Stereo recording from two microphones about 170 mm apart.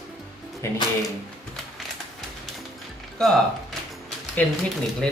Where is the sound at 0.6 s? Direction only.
15° left (ahead or behind).